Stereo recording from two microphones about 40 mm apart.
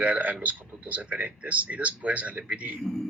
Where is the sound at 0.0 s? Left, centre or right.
Right.